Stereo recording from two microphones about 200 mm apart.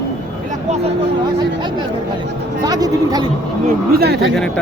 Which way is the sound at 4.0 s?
55° right (ahead or behind).